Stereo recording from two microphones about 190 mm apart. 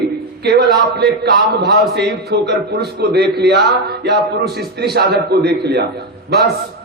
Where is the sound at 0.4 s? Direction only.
60° right (ahead or behind).